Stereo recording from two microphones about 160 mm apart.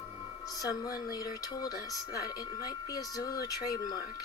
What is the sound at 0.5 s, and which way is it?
Speech, 20° left (ahead or behind).